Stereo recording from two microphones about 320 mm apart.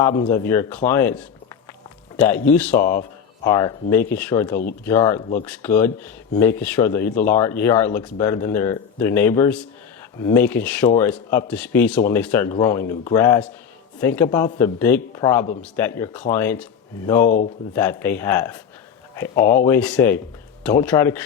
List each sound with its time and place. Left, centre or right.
0.3 s speech: centre
17.2 s speech: left
17.7 s speech: centre
19.6 s speech: centre